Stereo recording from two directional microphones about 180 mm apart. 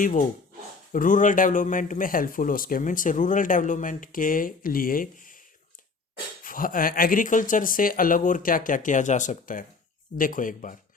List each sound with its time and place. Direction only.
0.0 s speech: 45° left (ahead or behind)
6.4 s speech: 50° left (ahead or behind)